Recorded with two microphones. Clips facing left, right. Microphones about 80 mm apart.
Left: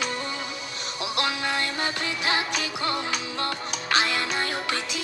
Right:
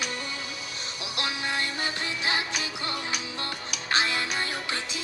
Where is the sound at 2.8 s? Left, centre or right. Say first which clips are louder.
Left 5 dB; left.